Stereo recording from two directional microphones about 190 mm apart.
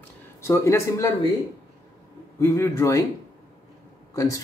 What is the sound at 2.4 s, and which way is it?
Speech, 15° left (ahead or behind).